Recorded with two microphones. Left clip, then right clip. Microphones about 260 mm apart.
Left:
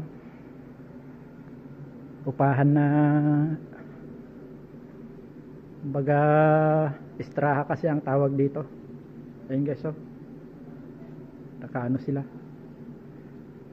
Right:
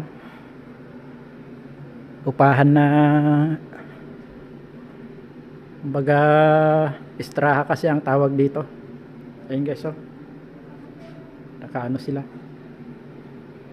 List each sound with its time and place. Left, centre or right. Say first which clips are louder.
2.2 s speech: right 8 dB; right
5.9 s speech: right 6 dB; right
9.5 s speech: right 4 dB; centre
11.6 s speech: right 3 dB; centre